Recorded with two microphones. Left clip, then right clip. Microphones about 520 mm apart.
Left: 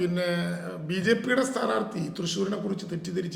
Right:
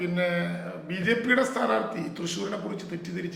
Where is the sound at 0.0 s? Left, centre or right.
Left.